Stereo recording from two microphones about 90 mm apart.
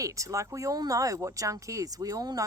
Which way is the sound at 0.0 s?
40° right (ahead or behind).